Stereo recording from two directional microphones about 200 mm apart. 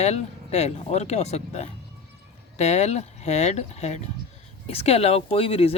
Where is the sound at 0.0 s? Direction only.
35° left (ahead or behind).